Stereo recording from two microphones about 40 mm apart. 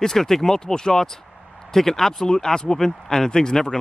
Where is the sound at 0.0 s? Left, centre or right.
Centre.